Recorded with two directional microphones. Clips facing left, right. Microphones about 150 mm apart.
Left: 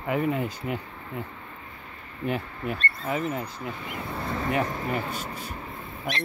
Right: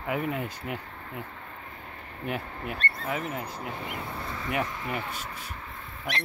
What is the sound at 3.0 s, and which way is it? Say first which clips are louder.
Speech: left 5 dB; 5° right (ahead or behind).